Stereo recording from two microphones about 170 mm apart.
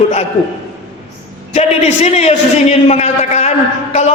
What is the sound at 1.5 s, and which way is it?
A man's voice, 40° left (ahead or behind).